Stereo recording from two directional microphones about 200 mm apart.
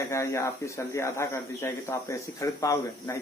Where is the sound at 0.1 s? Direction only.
15° left (ahead or behind).